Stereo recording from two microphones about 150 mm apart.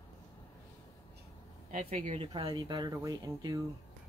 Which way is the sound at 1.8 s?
40° right (ahead or behind).